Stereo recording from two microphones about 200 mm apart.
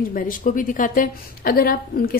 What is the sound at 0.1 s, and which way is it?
A woman's voice, 45° left (ahead or behind).